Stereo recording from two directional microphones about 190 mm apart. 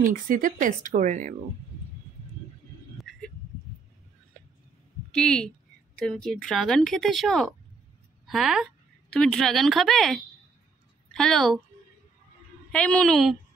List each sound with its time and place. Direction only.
0.0 s speech: 45° right (ahead or behind)
3.0 s a sound: centre (ahead or behind)
5.1 s a woman's voice: 5° left (ahead or behind)
12.7 s a woman's voice: 5° left (ahead or behind)